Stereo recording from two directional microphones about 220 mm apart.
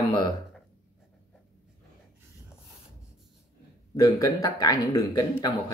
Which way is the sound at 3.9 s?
15° left (ahead or behind).